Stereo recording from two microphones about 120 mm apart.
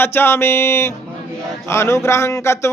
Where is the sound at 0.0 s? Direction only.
20° left (ahead or behind).